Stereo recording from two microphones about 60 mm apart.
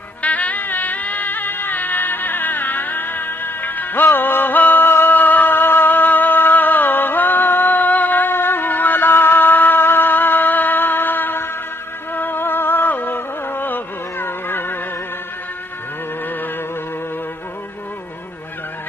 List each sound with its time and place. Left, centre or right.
0.2 s music: left